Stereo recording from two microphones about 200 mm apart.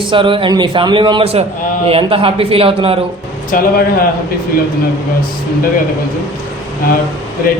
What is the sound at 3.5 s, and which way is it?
Speech, 45° left (ahead or behind).